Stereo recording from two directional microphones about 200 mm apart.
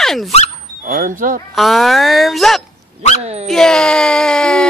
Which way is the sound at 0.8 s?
45° right (ahead or behind).